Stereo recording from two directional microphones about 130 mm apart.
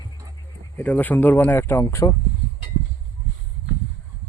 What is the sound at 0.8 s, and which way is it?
Speech, 10° left (ahead or behind).